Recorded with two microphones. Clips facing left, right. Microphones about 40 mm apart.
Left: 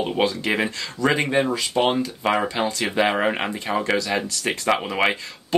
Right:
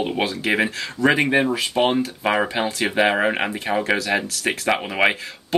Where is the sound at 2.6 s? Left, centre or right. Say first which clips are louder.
Right 1 dB; right.